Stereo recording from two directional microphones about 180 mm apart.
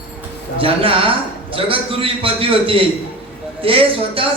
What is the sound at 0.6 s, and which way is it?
A man's voice, 30° right (ahead or behind).